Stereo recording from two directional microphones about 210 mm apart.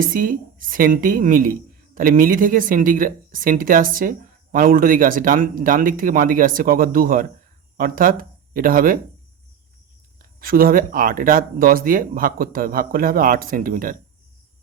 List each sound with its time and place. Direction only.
0.0 s speech: 40° right (ahead or behind)
10.4 s speech: 45° right (ahead or behind)